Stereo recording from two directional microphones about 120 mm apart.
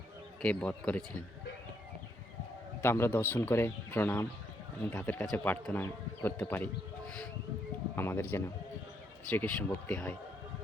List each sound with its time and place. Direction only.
0.4 s speech: 10° left (ahead or behind)
2.8 s a man's voice: 20° left (ahead or behind)
7.9 s speech: 20° left (ahead or behind)